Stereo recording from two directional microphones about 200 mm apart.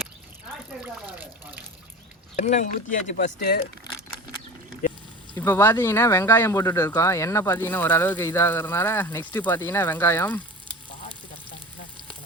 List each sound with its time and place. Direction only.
0.8 s water: 10° right (ahead or behind)
2.3 s speech: 35° left (ahead or behind)
5.4 s speech: 10° left (ahead or behind)